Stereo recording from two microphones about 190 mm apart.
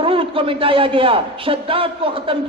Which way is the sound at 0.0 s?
30° right (ahead or behind).